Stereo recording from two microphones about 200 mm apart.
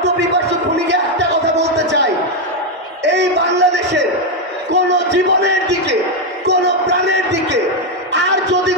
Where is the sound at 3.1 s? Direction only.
60° right (ahead or behind).